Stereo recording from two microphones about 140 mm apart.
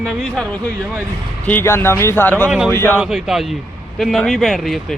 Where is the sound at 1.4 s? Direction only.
15° left (ahead or behind).